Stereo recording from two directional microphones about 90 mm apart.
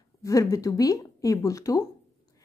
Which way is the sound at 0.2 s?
40° left (ahead or behind).